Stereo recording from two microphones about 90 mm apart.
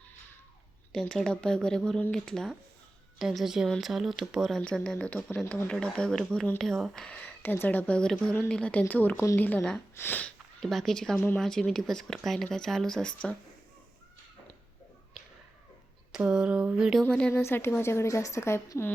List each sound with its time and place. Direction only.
0.9 s speech: 5° left (ahead or behind)
4.6 s a woman's voice: 10° left (ahead or behind)
9.6 s speech: 5° left (ahead or behind)
9.9 s a woman's voice: 25° left (ahead or behind)
10.2 s speech: 5° left (ahead or behind)
16.1 s a sound: 10° right (ahead or behind)
17.0 s speech: 10° left (ahead or behind)
17.3 s a woman's voice: 25° left (ahead or behind)